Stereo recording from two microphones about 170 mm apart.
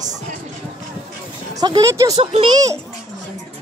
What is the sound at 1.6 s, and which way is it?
Speech, 20° right (ahead or behind).